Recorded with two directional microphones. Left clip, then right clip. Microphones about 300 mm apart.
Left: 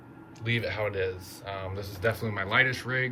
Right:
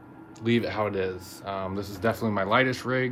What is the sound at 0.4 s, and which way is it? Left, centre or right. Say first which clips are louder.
Speech: right 3 dB; centre.